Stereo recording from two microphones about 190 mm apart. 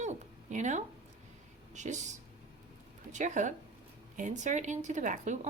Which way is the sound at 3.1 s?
40° right (ahead or behind).